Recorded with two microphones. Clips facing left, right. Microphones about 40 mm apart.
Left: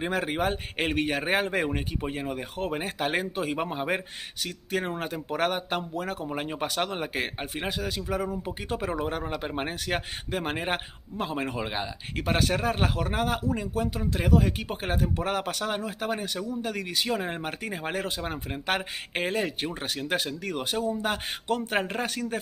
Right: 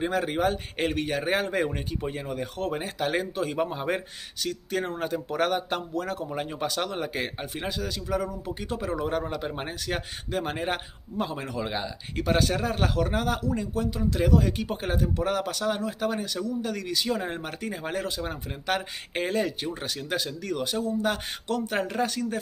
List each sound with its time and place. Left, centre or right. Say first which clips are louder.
0.0 s a man's voice: right 2 dB; left
9.0 s a man's voice: right 2 dB; centre